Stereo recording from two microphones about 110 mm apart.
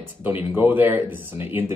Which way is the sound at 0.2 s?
15° right (ahead or behind).